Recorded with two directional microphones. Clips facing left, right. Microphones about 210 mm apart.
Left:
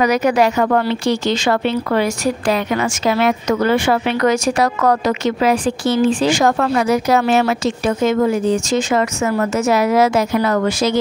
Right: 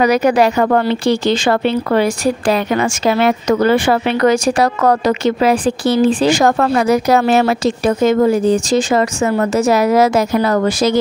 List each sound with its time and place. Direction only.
0.0 s speech: 30° right (ahead or behind)